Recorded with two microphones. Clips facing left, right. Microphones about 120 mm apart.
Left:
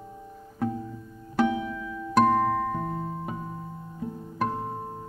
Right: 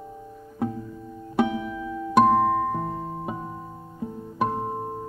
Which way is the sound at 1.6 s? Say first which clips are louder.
Right 3 dB; 20° right (ahead or behind).